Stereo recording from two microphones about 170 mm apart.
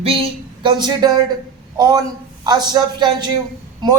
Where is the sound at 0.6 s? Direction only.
25° right (ahead or behind).